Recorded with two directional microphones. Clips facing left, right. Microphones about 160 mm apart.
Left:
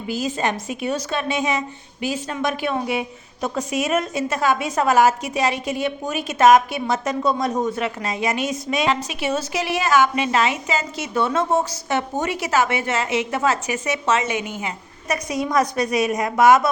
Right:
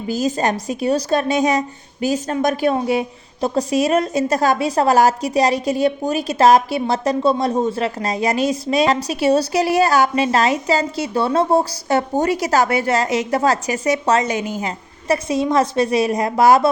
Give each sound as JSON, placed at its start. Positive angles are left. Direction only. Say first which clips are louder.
{"t": 0.1, "sound": "a woman's voice", "louder": "right 4 dB", "side_deg": -40}